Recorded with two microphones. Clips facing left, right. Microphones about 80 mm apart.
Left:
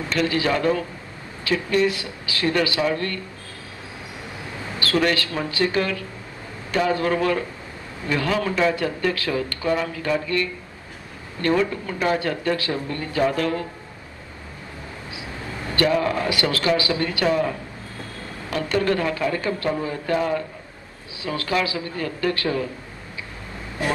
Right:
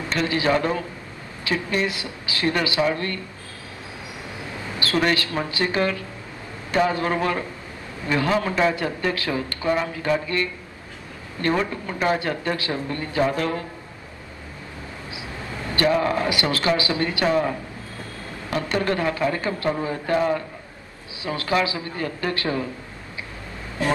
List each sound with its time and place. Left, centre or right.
0.1 s a man's voice: right
4.7 s a man's voice: right
15.7 s a man's voice: right
18.5 s a man's voice: right